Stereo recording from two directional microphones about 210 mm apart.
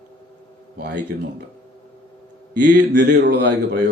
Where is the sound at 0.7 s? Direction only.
50° right (ahead or behind).